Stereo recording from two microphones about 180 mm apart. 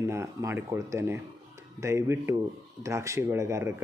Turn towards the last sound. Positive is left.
turn(degrees=-15)  # may be behind; listen again after turning